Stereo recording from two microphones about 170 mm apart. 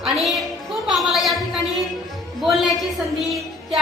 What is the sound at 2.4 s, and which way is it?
Speech, centre (ahead or behind).